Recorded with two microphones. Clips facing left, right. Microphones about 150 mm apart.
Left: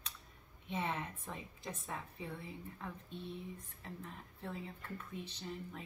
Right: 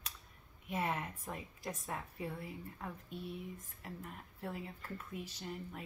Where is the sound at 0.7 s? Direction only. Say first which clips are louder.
Right 2 dB; 10° right (ahead or behind).